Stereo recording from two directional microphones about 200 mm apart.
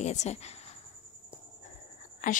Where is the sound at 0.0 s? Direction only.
35° left (ahead or behind).